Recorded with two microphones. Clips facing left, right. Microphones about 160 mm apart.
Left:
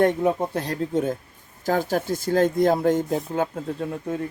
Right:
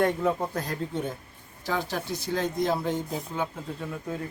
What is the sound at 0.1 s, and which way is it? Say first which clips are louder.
Speech: left 4 dB; 20° left (ahead or behind).